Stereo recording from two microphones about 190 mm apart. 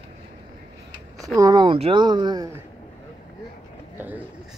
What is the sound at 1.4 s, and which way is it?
Speech, 20° right (ahead or behind).